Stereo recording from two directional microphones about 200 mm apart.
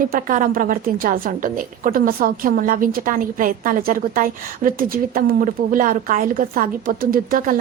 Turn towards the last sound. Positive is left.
turn(degrees=-45)  # may be behind; listen again after turning